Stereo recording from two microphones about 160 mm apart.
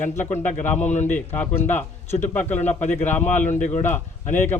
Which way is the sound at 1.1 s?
10° left (ahead or behind).